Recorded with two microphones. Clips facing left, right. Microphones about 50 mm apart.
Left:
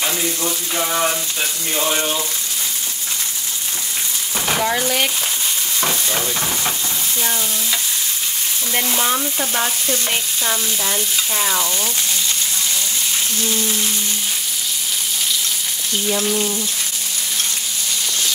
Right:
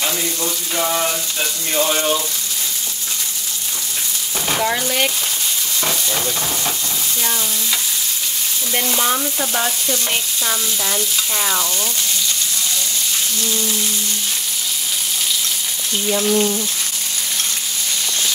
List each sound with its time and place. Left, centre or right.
0.0 s water tap: centre
1.4 s stir: centre
4.5 s speech: centre
5.9 s stir: centre
8.7 s stir: centre
16.1 s stir: centre